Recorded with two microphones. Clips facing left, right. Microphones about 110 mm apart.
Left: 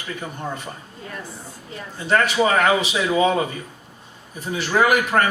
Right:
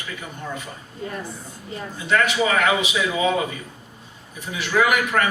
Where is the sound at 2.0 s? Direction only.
40° left (ahead or behind).